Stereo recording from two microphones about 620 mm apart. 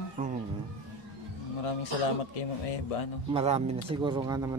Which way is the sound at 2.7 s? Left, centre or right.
Left.